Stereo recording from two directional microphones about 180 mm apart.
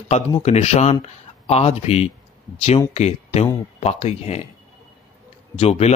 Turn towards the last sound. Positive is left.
turn(degrees=35)  # may be behind; listen again after turning